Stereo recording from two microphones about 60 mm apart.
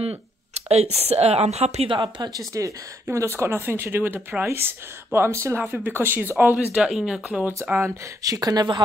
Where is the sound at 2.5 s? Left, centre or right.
Right.